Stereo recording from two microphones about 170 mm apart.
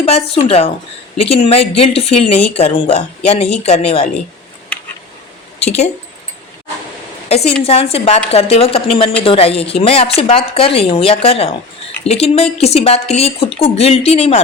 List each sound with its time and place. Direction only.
0.0 s a woman's voice: 35° left (ahead or behind)
7.3 s a woman's voice: 35° left (ahead or behind)